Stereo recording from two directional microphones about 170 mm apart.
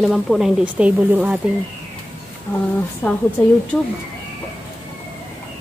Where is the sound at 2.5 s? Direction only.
15° left (ahead or behind).